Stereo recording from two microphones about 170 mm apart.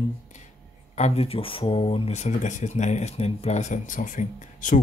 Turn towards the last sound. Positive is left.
turn(degrees=50)  # may be behind; listen again after turning